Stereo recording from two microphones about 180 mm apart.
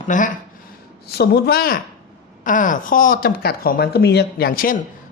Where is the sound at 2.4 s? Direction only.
45° left (ahead or behind).